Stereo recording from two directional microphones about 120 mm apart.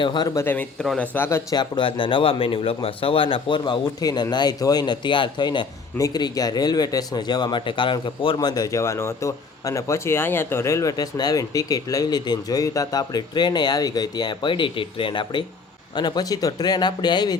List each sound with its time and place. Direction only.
0.0 s speech: 40° left (ahead or behind)
0.3 s a man's voice: 15° left (ahead or behind)
1.5 s speech: 40° left (ahead or behind)
3.6 s speech: 35° left (ahead or behind)
8.4 s speech: 35° left (ahead or behind)